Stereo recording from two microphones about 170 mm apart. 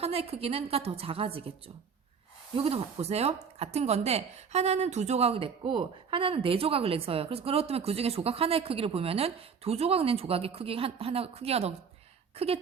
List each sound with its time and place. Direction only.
0.0 s speech: 35° right (ahead or behind)